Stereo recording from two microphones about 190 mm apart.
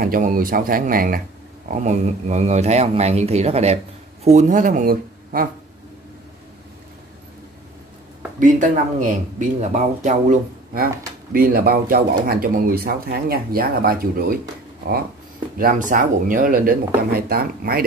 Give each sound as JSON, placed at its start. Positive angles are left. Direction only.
{"t": 0.0, "sound": "speech", "side_deg": -45}
{"t": 8.4, "sound": "speech", "side_deg": -45}
{"t": 15.5, "sound": "speech", "side_deg": -45}